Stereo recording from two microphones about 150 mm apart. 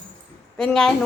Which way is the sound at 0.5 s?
5° left (ahead or behind).